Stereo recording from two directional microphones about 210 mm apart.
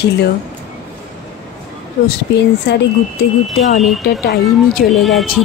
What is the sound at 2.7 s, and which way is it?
Speech, 55° left (ahead or behind).